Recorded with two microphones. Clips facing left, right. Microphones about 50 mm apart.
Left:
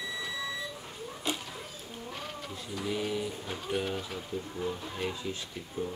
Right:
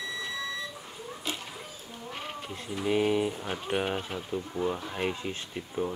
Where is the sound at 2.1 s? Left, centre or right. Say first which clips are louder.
Right 3 dB; right.